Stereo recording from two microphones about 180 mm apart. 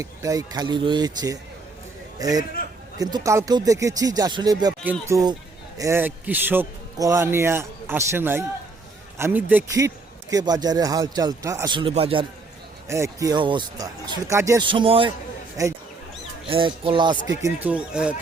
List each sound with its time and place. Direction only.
0.0 s a man's voice: 20° right (ahead or behind)
12.9 s a man's voice: 15° right (ahead or behind)
14.7 s a man's voice: 30° right (ahead or behind)
15.6 s speech: 20° right (ahead or behind)
16.5 s a man's voice: 30° right (ahead or behind)
17.4 s speech: 10° right (ahead or behind)